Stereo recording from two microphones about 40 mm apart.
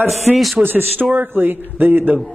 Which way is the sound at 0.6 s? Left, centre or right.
Right.